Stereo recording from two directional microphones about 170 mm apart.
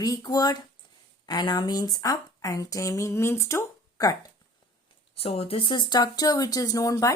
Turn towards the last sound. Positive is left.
turn(degrees=20)  # may be behind; listen again after turning